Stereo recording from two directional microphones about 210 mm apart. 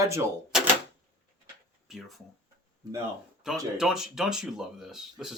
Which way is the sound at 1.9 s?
Centre (ahead or behind).